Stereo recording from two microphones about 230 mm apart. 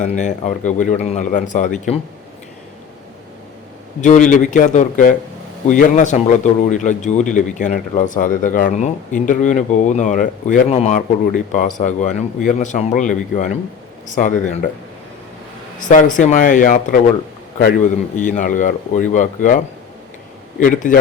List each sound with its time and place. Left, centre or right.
0.0 s speech: left
4.0 s speech: left
16.1 s speech: left
20.6 s speech: left